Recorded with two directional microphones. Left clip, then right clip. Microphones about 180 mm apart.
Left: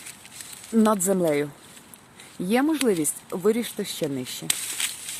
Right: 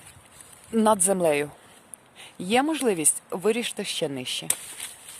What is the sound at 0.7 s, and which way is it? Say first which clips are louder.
Speech: even; 25° right (ahead or behind).